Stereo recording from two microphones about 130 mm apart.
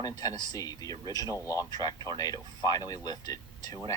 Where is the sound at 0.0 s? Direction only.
30° left (ahead or behind).